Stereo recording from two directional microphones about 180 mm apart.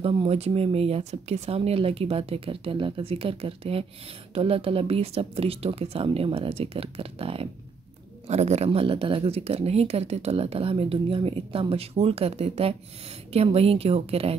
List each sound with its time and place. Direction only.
0.0 s speech: 30° right (ahead or behind)